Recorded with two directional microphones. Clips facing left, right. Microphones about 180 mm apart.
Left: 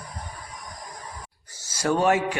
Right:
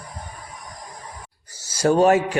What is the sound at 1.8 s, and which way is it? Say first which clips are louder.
Speech: right 5 dB; 35° right (ahead or behind).